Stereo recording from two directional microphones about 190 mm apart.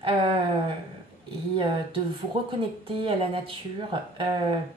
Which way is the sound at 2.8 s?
30° right (ahead or behind).